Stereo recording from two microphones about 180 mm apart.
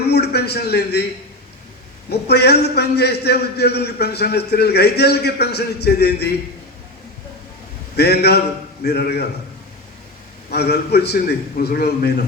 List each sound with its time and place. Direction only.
0.0 s a man's voice: 65° left (ahead or behind)
2.0 s a man's voice: 65° left (ahead or behind)
7.9 s a man's voice: 65° left (ahead or behind)
10.5 s a man's voice: 65° left (ahead or behind)